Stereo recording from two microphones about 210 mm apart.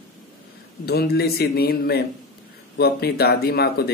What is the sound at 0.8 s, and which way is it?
Speech, 50° left (ahead or behind).